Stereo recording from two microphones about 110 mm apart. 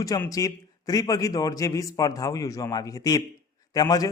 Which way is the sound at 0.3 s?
30° left (ahead or behind).